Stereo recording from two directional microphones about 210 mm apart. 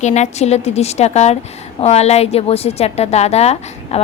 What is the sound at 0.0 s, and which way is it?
A woman's voice, 35° left (ahead or behind).